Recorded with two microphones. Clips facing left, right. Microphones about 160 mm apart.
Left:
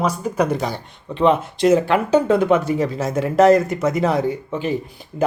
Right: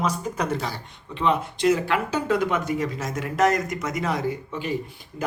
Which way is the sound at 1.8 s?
25° left (ahead or behind).